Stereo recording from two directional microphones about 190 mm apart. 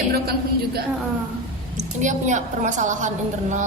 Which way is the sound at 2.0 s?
40° right (ahead or behind).